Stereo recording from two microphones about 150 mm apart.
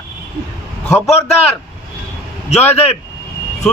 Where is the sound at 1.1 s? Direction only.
45° left (ahead or behind).